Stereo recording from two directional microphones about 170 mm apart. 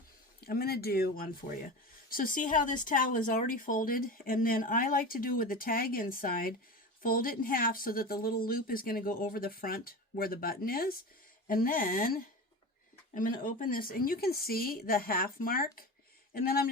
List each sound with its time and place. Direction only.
0.4 s speech: 65° left (ahead or behind)